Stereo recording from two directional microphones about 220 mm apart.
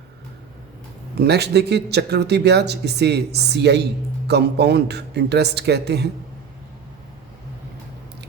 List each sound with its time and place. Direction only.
1.2 s speech: 50° right (ahead or behind)